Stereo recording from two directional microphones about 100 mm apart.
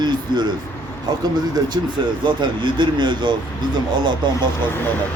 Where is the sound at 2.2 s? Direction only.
50° right (ahead or behind).